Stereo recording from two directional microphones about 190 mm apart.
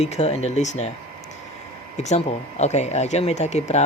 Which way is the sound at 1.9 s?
35° left (ahead or behind).